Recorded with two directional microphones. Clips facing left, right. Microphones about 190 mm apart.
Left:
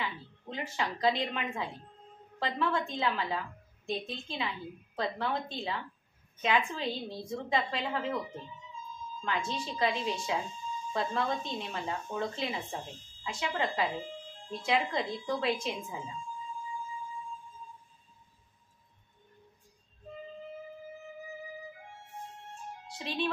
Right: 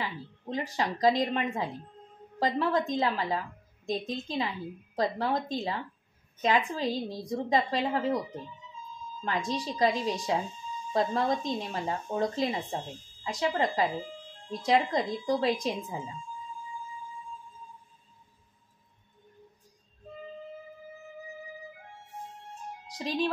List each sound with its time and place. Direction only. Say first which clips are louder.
0.0 s a woman's voice: right 2 dB; 35° right (ahead or behind)
9.5 s a woman's voice: right 6 dB; 40° right (ahead or behind)
22.8 s speech: right 4 dB; 40° right (ahead or behind)